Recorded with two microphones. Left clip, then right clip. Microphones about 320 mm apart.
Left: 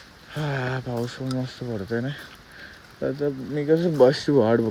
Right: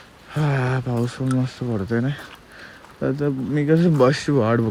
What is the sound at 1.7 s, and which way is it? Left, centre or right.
Speech, right.